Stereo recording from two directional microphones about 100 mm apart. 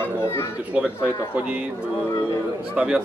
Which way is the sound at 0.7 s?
10° right (ahead or behind).